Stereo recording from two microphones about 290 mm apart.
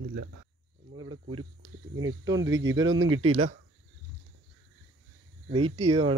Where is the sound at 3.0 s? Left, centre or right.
Right.